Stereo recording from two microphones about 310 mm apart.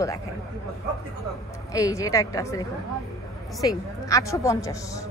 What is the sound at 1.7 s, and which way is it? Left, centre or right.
Speech, centre.